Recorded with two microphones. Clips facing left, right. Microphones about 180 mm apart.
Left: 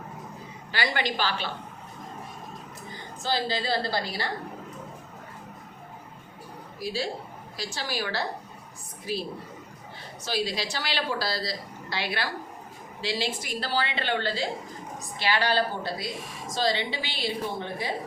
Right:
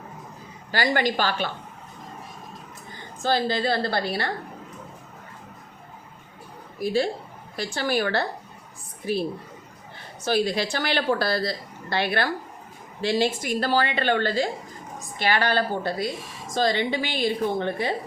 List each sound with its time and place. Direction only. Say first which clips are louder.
0.7 s a woman's voice: right 6 dB; 45° right (ahead or behind)
3.2 s a woman's voice: right 5 dB; 55° right (ahead or behind)
6.7 s a woman's voice: right 7 dB; 55° right (ahead or behind)
10.2 s a woman's voice: right 6 dB; 50° right (ahead or behind)